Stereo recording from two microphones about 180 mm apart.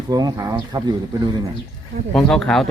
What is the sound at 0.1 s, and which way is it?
Speech, 20° right (ahead or behind).